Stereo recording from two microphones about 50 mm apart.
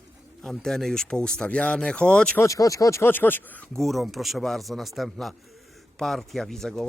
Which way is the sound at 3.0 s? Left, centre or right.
Left.